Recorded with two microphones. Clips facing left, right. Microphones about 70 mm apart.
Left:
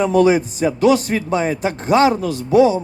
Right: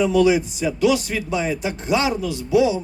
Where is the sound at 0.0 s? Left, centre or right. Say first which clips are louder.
Left 3 dB; left.